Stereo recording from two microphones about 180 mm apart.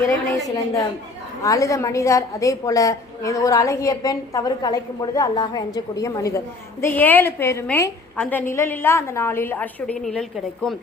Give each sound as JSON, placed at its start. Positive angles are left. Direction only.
{"t": 0.3, "sound": "a woman's voice", "side_deg": 20}